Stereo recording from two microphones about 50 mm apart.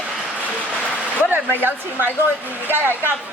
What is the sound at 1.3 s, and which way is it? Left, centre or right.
Speech, right.